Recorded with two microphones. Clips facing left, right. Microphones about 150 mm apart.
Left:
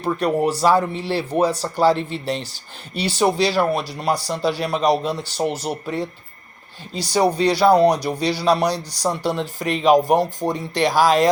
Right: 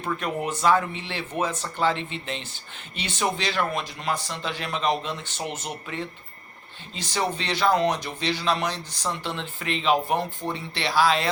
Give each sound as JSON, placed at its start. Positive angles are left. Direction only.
{"t": 0.0, "sound": "speech", "side_deg": 40}